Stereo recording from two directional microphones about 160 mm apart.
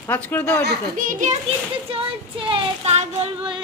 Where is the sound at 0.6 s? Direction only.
75° right (ahead or behind); by 1.4 s 55° right (ahead or behind).